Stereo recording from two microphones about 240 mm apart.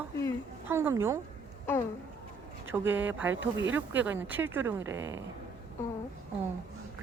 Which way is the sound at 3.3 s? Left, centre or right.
Right.